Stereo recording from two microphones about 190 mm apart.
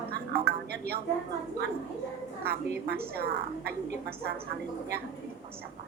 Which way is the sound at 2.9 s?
55° right (ahead or behind).